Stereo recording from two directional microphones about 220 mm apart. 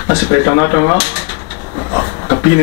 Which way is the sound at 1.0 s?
15° left (ahead or behind).